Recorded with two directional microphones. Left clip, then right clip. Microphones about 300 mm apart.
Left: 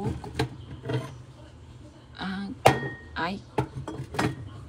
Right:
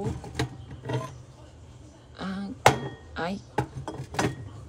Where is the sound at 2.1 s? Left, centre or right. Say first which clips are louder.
Left 1 dB; centre.